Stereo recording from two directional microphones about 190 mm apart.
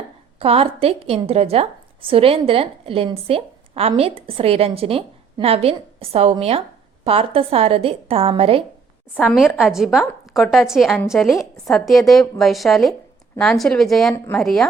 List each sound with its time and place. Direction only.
0.3 s a woman's voice: 30° right (ahead or behind)
9.1 s a woman's voice: 5° left (ahead or behind)